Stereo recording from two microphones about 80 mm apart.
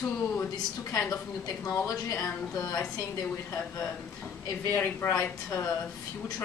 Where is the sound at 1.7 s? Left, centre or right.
Left.